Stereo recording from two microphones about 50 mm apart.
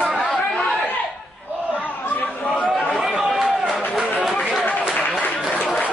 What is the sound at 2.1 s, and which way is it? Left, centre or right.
Chatter, left.